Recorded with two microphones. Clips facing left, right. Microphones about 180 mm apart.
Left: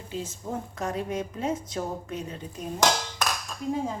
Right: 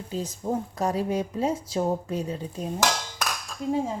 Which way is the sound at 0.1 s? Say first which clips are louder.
Right 5 dB; 40° right (ahead or behind).